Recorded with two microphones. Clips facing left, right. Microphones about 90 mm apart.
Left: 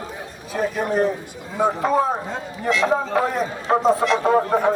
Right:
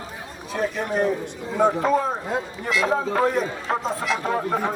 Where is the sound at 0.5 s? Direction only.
Centre (ahead or behind).